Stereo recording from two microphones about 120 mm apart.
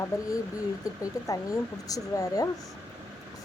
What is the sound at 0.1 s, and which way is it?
Speech, 30° left (ahead or behind).